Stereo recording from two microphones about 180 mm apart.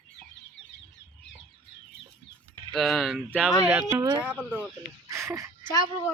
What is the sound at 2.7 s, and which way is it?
Speech, centre (ahead or behind).